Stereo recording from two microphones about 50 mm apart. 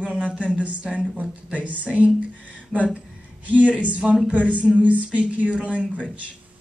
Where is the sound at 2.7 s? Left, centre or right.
Centre.